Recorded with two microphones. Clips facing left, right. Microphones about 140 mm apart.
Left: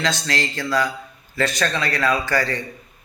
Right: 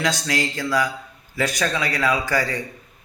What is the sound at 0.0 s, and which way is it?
A man's voice, 10° right (ahead or behind).